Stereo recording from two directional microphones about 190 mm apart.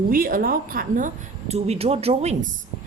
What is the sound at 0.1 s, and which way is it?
Speech, 50° right (ahead or behind).